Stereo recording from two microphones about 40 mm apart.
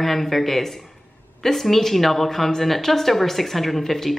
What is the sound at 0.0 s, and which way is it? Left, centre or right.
A woman's voice, centre.